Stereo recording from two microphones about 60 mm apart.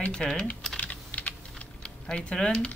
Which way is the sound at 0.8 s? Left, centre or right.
Left.